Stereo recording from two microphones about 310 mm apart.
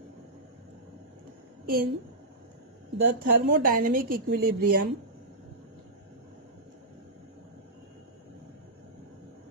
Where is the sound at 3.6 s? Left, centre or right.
Right.